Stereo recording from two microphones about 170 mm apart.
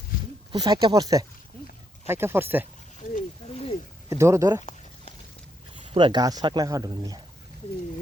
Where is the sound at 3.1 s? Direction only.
40° left (ahead or behind).